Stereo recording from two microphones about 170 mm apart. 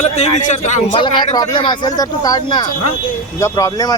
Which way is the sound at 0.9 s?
25° left (ahead or behind).